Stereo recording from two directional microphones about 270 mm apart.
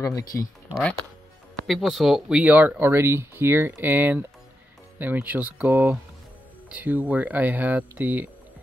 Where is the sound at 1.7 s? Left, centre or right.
Centre.